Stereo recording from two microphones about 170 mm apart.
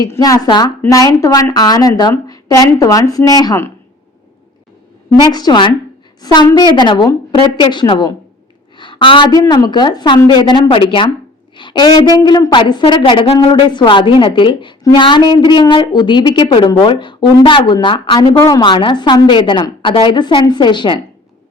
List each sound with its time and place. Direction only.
0.0 s a woman's voice: 20° left (ahead or behind)
5.3 s a woman's voice: 25° left (ahead or behind)